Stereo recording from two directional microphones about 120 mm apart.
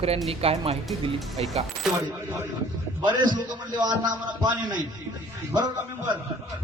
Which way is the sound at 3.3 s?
40° right (ahead or behind).